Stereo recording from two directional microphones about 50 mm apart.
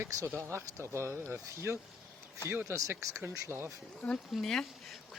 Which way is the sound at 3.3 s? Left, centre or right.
Right.